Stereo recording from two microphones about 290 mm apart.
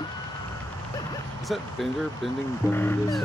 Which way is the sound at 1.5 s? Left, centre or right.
Centre.